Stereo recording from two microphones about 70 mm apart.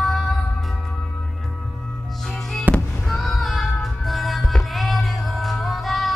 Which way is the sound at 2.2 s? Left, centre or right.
Centre.